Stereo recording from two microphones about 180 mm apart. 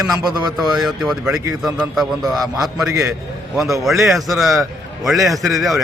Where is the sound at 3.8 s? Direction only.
Centre (ahead or behind).